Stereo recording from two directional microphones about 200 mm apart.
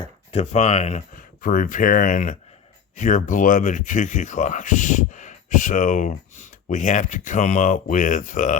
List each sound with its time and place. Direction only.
0.0 s speech: 30° left (ahead or behind)